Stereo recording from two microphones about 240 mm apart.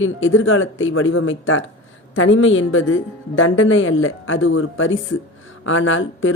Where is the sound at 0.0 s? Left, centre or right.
Left.